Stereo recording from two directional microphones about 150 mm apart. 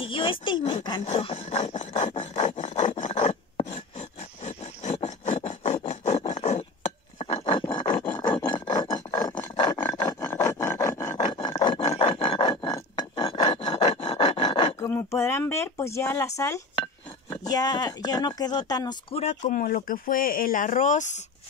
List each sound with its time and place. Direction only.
0.0 s speech: 35° left (ahead or behind)
1.0 s rub: 40° left (ahead or behind)
4.5 s filing: 45° left (ahead or behind); by 9.2 s 30° left (ahead or behind)
10.0 s filing: 15° left (ahead or behind)
11.3 s filing: 30° left (ahead or behind)
14.8 s a sound: 20° left (ahead or behind)
16.3 s speech: 20° left (ahead or behind)
19.1 s speech: 50° left (ahead or behind)